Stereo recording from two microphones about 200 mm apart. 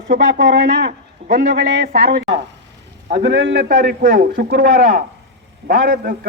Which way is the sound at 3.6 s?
40° right (ahead or behind).